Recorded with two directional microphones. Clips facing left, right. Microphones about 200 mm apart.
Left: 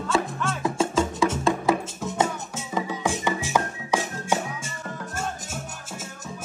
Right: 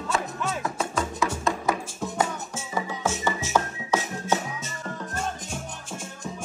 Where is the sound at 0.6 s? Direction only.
25° left (ahead or behind).